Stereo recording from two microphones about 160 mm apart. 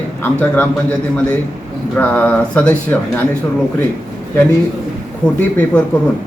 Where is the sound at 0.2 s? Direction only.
10° left (ahead or behind).